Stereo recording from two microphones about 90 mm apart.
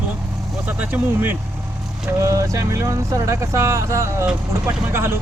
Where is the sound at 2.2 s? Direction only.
35° right (ahead or behind).